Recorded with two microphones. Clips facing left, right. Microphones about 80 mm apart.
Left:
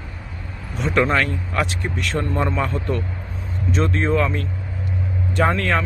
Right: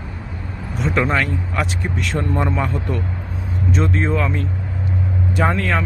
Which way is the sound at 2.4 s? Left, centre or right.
Centre.